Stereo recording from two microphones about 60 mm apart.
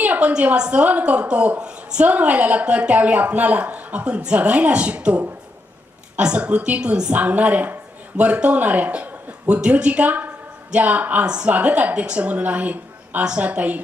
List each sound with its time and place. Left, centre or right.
0.0 s a woman's voice: right